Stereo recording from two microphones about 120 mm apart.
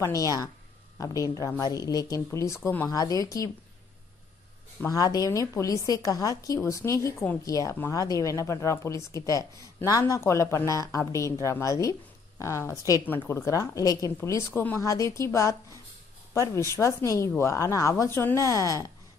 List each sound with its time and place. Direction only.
0.0 s speech: 30° left (ahead or behind)
2.9 s speech: 30° left (ahead or behind)
4.8 s a woman's voice: 30° left (ahead or behind)
14.8 s speech: 25° left (ahead or behind)